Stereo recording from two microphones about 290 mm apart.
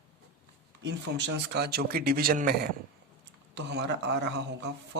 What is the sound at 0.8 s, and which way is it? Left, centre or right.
Speech, right.